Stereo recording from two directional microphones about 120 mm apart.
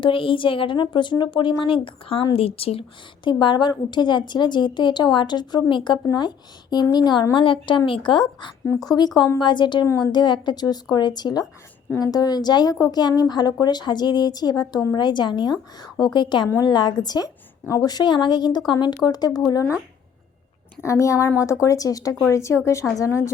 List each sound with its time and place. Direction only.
0.0 s speech: 45° left (ahead or behind)
3.4 s a woman's voice: 40° left (ahead or behind)
8.6 s a woman's voice: 30° left (ahead or behind)
20.8 s a woman's voice: 25° left (ahead or behind)